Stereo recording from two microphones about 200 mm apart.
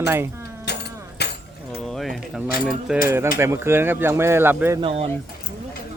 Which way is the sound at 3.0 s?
15° right (ahead or behind).